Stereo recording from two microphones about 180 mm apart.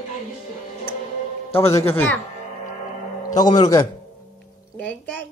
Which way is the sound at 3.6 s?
20° left (ahead or behind).